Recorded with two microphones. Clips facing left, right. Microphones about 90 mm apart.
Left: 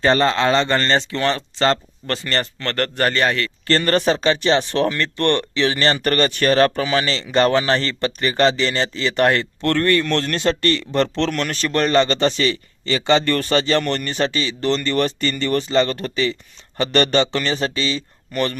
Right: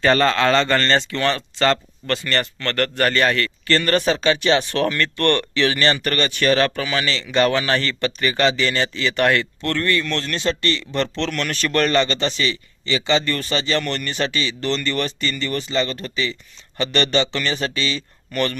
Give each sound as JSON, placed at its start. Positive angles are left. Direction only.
{"t": 0.0, "sound": "speech", "side_deg": 25}
{"t": 3.7, "sound": "speech", "side_deg": 35}
{"t": 11.2, "sound": "speech", "side_deg": 35}
{"t": 12.0, "sound": "speech", "side_deg": 40}